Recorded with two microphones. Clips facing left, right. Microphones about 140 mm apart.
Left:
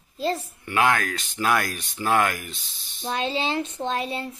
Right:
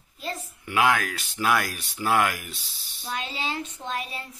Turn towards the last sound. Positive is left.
turn(degrees=30)  # may be behind; listen again after turning